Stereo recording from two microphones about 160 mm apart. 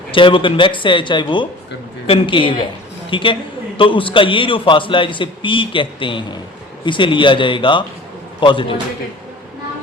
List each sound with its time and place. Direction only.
0.1 s a man's voice: 30° left (ahead or behind)